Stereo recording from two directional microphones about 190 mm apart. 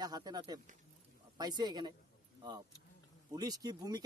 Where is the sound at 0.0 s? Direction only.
20° right (ahead or behind).